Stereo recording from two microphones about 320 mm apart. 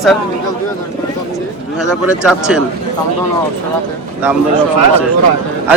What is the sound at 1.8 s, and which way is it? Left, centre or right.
Speech, centre.